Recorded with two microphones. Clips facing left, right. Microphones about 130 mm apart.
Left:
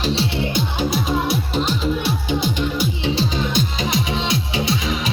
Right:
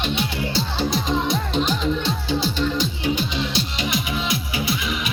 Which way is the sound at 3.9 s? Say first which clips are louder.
Left 3 dB; 25° left (ahead or behind).